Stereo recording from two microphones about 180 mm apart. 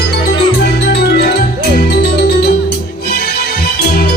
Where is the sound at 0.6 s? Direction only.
65° left (ahead or behind).